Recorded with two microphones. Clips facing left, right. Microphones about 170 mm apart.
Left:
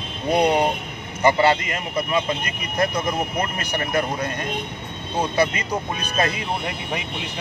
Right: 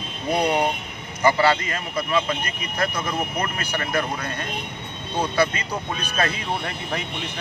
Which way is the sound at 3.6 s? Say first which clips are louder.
Left 2 dB; 20° left (ahead or behind).